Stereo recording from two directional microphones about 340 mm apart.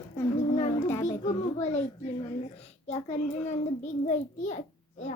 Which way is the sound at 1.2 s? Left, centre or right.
Centre.